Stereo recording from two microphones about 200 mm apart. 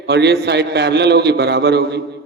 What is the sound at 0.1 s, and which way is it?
A man's voice, 55° right (ahead or behind).